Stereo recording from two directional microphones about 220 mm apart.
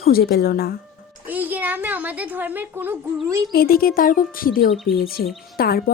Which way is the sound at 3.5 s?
40° left (ahead or behind).